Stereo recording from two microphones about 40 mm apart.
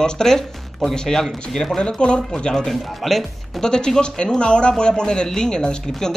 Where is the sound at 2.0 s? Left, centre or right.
Left.